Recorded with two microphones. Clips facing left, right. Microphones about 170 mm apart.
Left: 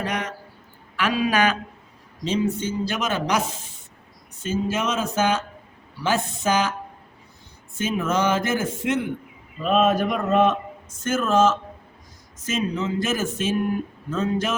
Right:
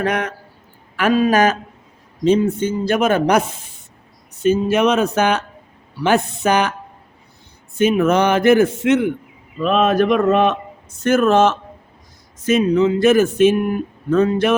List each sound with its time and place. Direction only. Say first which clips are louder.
0.0 s speech: right 7 dB; 60° right (ahead or behind)
2.2 s speech: right 8 dB; 55° right (ahead or behind)
4.4 s a man's voice: right 9 dB; 65° right (ahead or behind)
7.8 s a man's voice: right 8 dB; 65° right (ahead or behind)